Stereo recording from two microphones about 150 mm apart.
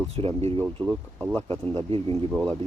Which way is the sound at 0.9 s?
5° left (ahead or behind).